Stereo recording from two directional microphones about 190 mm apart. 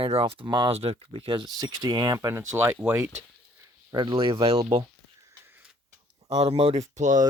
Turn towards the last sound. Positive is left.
turn(degrees=-40)  # may be behind; listen again after turning